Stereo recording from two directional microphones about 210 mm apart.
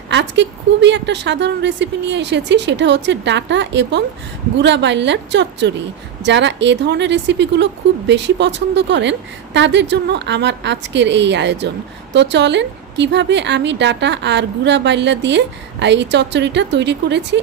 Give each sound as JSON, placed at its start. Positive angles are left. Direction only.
{"t": 0.1, "sound": "speech", "side_deg": -55}